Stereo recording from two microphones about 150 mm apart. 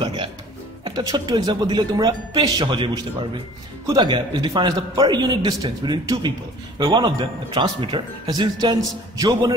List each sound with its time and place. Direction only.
0.0 s a man's voice: 35° right (ahead or behind)